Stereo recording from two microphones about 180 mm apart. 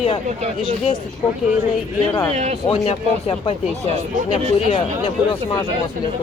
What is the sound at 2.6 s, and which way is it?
Speech, 30° left (ahead or behind).